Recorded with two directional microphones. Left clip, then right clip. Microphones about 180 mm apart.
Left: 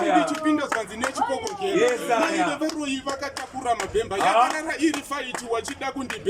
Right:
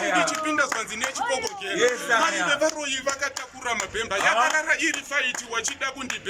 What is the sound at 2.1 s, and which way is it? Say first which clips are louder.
Speech: right 1 dB; 25° left (ahead or behind).